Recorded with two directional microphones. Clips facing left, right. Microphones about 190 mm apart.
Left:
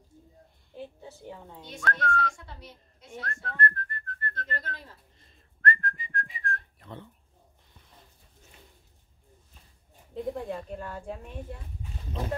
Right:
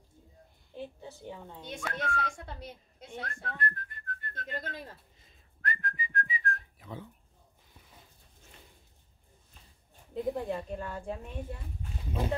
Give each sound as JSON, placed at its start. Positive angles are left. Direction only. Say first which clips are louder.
{"t": 0.7, "sound": "a woman's voice", "louder": "even", "side_deg": 5}
{"t": 2.3, "sound": "a child's voice", "louder": "right 4 dB", "side_deg": -55}
{"t": 3.1, "sound": "whistling", "louder": "left 1 dB", "side_deg": 0}
{"t": 10.1, "sound": "speech", "louder": "right 1 dB", "side_deg": 0}